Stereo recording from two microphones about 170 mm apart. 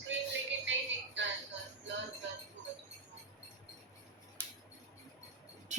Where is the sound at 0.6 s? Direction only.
90° right.